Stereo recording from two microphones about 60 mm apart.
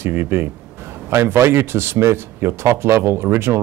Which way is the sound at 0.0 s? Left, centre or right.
Right.